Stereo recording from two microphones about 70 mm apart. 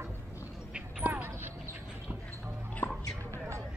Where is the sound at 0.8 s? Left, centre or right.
Centre.